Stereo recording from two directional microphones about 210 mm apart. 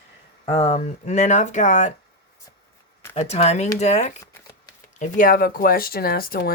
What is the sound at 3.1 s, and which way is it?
Speech, 30° left (ahead or behind).